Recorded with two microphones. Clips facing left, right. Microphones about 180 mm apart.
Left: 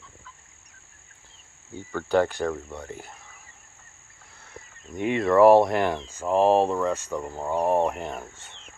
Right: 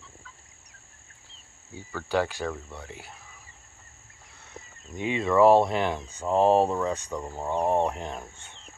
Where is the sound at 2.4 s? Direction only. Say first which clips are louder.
Left 5 dB; 45° left (ahead or behind).